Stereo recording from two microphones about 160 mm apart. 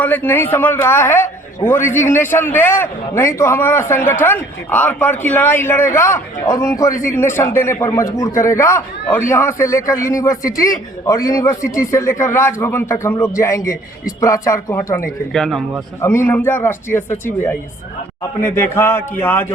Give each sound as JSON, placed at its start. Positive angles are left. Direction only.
{"t": 0.0, "sound": "a man's voice", "side_deg": 10}
{"t": 15.3, "sound": "speech", "side_deg": 0}
{"t": 16.0, "sound": "a man's voice", "side_deg": 15}